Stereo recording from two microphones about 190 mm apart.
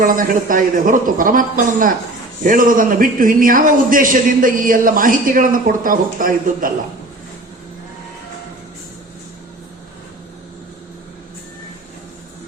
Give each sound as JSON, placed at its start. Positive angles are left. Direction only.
{"t": 0.0, "sound": "a man's voice", "side_deg": -45}